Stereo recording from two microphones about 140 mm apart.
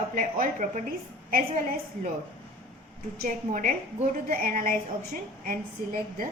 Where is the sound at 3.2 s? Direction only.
70° right (ahead or behind).